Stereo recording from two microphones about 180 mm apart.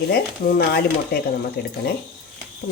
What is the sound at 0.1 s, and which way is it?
Speech, 60° left (ahead or behind).